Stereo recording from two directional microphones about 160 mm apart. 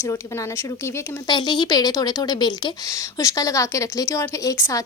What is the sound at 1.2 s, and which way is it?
A woman's voice, 25° left (ahead or behind).